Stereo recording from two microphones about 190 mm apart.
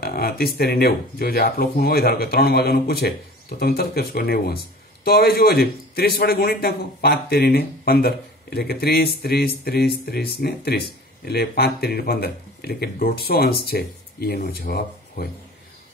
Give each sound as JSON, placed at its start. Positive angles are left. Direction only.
{"t": 0.0, "sound": "a man's voice", "side_deg": 55}